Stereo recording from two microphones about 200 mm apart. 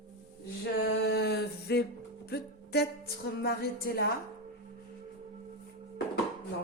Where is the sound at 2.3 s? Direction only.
55° left (ahead or behind).